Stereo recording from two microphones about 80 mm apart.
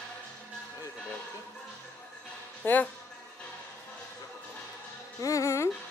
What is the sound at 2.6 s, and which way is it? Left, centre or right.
Speech, left.